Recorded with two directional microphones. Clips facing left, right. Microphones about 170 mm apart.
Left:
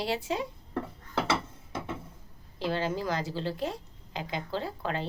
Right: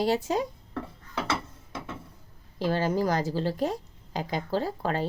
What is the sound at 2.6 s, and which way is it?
A woman's voice, 40° right (ahead or behind).